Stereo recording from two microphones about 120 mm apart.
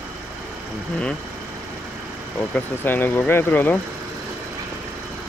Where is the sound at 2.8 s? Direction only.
15° left (ahead or behind).